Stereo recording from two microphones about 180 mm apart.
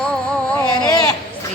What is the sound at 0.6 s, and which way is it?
Baby cry, 20° left (ahead or behind).